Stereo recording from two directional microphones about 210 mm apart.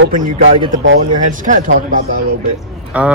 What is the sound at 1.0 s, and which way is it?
Speech, 40° right (ahead or behind).